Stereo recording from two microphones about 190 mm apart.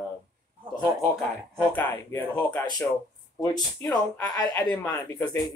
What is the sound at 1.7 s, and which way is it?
Speech, 10° left (ahead or behind).